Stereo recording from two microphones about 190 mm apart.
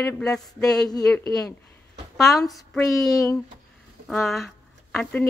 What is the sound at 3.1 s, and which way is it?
Speech, 20° left (ahead or behind).